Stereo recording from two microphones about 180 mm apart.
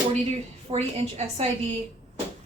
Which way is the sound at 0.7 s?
35° right (ahead or behind).